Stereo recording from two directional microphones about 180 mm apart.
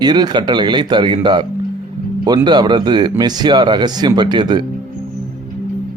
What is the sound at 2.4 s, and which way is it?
Speech, 25° right (ahead or behind).